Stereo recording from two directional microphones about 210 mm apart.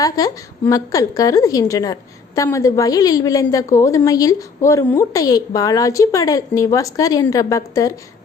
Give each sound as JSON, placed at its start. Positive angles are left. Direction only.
{"t": 0.0, "sound": "a woman's voice", "side_deg": 15}